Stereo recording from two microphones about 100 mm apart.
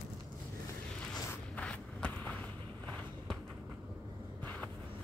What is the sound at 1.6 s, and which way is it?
Walk, 10° left (ahead or behind).